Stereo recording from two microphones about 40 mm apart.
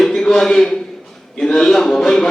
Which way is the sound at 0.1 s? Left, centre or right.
Centre.